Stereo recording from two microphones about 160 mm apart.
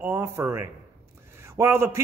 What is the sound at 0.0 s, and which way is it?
A man's voice, 15° right (ahead or behind).